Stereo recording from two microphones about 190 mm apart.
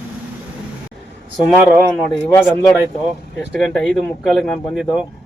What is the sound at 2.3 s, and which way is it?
Speech, 15° left (ahead or behind).